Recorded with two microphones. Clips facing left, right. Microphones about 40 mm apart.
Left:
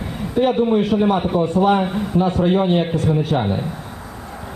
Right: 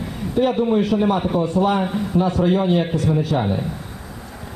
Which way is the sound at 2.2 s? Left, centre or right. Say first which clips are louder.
Left 1 dB; left.